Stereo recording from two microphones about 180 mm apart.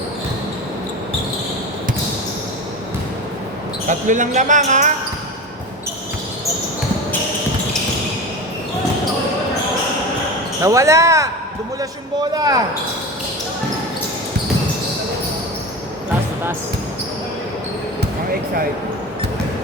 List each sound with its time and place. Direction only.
3.8 s speech: 45° right (ahead or behind)
10.6 s speech: 15° right (ahead or behind)